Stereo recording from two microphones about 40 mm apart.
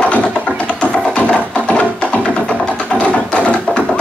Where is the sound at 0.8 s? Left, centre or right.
Left.